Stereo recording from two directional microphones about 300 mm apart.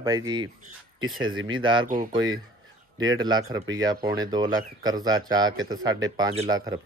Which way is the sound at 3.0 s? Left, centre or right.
Centre.